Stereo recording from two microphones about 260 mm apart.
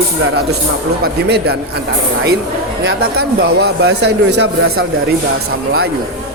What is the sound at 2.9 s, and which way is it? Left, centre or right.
Speech, right.